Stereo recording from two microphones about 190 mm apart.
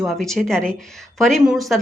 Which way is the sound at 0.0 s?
Centre (ahead or behind).